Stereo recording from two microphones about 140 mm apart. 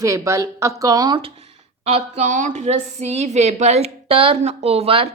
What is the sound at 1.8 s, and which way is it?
A woman's voice, 45° right (ahead or behind).